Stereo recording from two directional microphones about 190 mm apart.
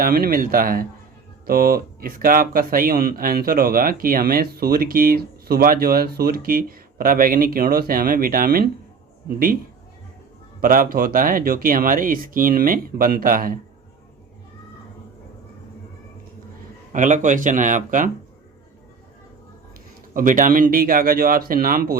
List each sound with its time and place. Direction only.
0.0 s speech: 50° right (ahead or behind)
10.6 s speech: 50° right (ahead or behind)
16.9 s speech: 40° right (ahead or behind)
20.1 s speech: 45° right (ahead or behind)